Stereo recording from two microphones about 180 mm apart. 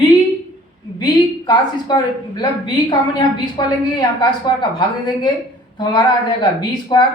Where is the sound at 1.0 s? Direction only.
25° left (ahead or behind).